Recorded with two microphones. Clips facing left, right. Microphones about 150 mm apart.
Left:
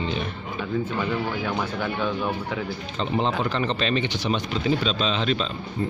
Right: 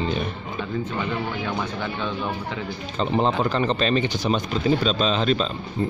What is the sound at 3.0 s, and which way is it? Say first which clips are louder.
Speech: right 3 dB; 40° right (ahead or behind).